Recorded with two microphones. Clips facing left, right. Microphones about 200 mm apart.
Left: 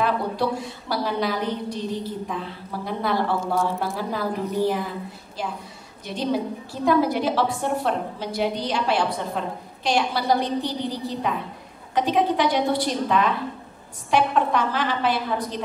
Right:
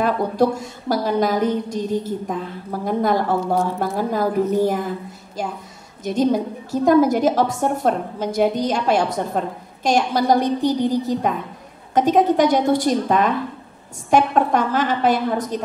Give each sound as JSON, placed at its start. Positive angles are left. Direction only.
{"t": 0.0, "sound": "a woman's voice", "side_deg": -45}